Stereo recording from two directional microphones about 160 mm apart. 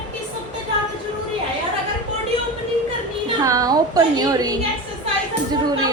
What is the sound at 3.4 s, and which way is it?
A woman's voice, 20° right (ahead or behind).